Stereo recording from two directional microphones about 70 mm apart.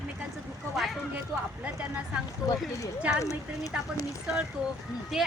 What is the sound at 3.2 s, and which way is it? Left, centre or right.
Speech, left.